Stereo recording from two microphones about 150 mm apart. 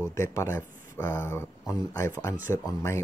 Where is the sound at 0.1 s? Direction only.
20° left (ahead or behind).